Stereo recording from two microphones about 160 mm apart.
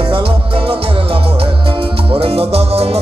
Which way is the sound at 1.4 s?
35° right (ahead or behind).